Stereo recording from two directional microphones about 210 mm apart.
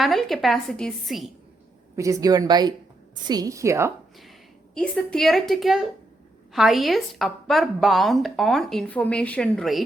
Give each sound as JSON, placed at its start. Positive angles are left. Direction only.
{"t": 0.0, "sound": "a woman's voice", "side_deg": 0}
{"t": 2.0, "sound": "speech", "side_deg": -15}
{"t": 4.7, "sound": "a woman's voice", "side_deg": 5}